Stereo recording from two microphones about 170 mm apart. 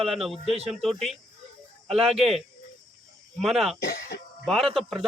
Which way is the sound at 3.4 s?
Centre (ahead or behind).